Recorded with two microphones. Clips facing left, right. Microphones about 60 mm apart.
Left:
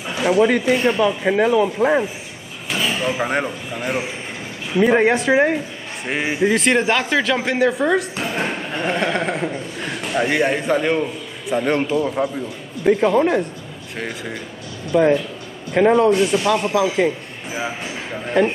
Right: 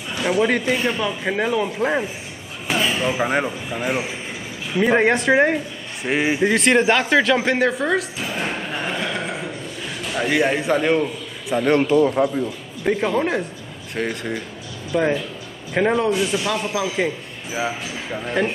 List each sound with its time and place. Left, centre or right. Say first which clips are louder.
0.1 s a man's voice: left 3 dB; centre
9.0 s a sound: left 5 dB; left
10.0 s a man's voice: left 1 dB; centre